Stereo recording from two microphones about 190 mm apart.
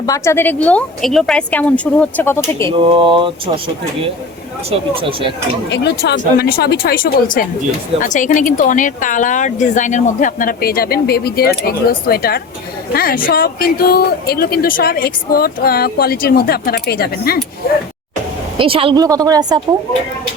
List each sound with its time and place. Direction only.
0.0 s a woman's voice: 15° left (ahead or behind)
2.6 s speech: 25° right (ahead or behind)
4.9 s speech: 30° right (ahead or behind)
5.6 s speech: 65° left (ahead or behind)
18.6 s speech: 30° right (ahead or behind)